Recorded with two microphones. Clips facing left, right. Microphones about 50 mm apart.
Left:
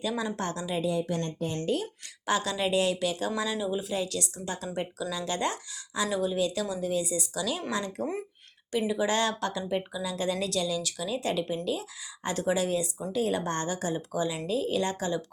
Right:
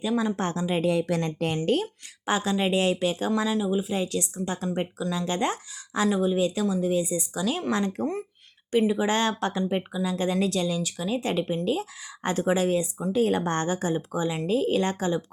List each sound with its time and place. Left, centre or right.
0.3 s a woman's voice: right
0.9 s a woman's voice: right
1.6 s speech: right
2.2 s a woman's voice: right
3.4 s speech: centre
3.8 s a woman's voice: right